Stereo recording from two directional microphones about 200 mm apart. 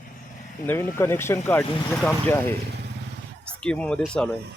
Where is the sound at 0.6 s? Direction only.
10° left (ahead or behind).